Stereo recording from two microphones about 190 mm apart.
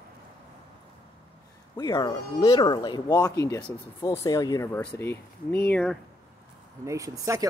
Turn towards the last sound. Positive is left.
turn(degrees=-15)  # may be behind; listen again after turning